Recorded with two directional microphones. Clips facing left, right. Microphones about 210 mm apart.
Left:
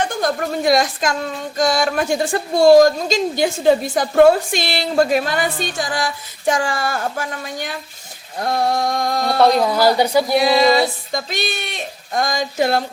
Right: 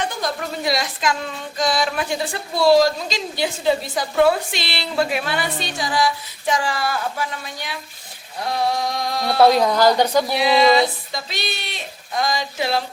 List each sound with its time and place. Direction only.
0.1 s speech: 50° left (ahead or behind)
9.4 s a woman's voice: centre (ahead or behind)
10.3 s speech: 45° left (ahead or behind)